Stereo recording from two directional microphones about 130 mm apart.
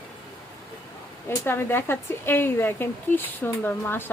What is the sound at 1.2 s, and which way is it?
Speech, 15° left (ahead or behind).